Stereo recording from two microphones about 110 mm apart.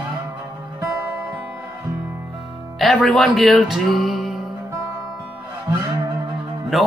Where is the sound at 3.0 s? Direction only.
Centre (ahead or behind).